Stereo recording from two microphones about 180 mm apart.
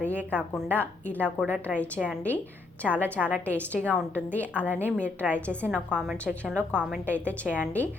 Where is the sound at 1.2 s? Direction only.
10° right (ahead or behind).